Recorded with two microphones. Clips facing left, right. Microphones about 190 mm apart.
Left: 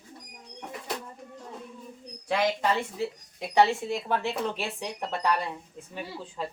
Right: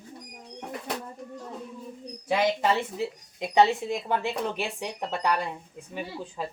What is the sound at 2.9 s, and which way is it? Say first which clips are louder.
Speech: right 1 dB; 20° right (ahead or behind).